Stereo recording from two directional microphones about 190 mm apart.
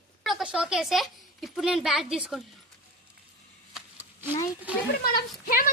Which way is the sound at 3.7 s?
10° right (ahead or behind).